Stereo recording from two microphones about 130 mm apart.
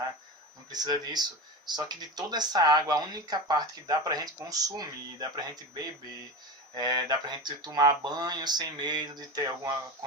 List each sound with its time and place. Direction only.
0.7 s speech: 30° right (ahead or behind)